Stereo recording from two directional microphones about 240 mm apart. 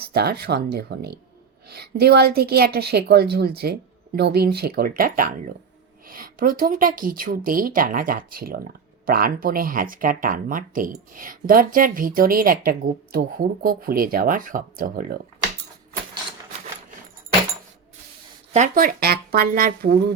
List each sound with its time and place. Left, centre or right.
0.0 s speech: right
18.5 s speech: right